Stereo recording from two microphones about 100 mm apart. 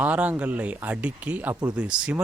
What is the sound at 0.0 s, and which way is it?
Speech, 15° right (ahead or behind).